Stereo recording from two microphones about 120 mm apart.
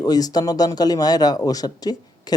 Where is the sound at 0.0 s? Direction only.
30° left (ahead or behind).